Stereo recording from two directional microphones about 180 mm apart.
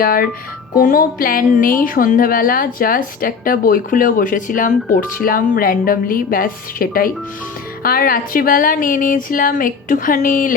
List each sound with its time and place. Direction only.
0.0 s a woman's voice: 55° left (ahead or behind)